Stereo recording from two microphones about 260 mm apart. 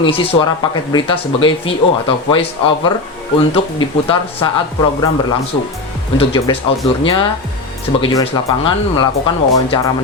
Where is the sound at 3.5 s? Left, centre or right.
Left.